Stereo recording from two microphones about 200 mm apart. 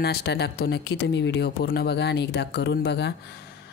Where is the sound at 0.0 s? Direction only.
55° left (ahead or behind).